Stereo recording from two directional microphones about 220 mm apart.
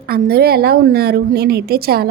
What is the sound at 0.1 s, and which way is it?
A woman's voice, 45° right (ahead or behind).